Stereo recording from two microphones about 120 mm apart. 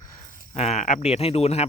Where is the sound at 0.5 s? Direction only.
70° left (ahead or behind).